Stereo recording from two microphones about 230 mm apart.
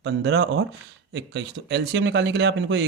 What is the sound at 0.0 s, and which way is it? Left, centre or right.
Speech, right.